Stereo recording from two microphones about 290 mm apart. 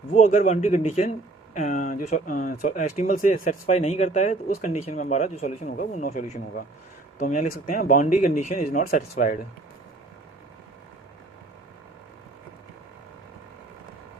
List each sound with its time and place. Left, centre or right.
0.1 s speech: left